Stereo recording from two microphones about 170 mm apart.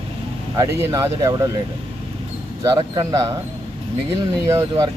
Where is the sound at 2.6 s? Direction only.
25° right (ahead or behind).